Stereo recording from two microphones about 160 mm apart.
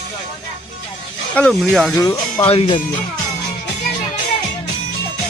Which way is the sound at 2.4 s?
35° left (ahead or behind).